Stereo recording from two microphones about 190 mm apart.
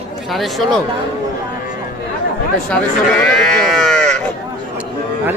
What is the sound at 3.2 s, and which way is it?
Sheep, centre (ahead or behind).